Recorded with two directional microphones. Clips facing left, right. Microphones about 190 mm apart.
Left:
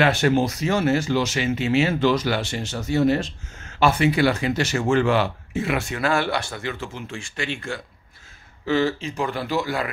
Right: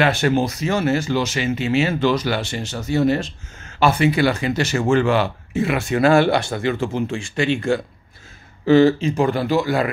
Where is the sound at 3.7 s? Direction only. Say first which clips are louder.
Right 2 dB; 45° right (ahead or behind); by 7.7 s 25° right (ahead or behind).